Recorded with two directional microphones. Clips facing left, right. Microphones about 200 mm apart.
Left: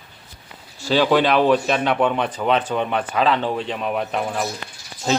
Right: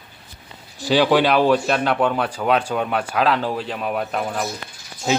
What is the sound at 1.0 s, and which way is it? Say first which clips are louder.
Speech: even; 5° right (ahead or behind).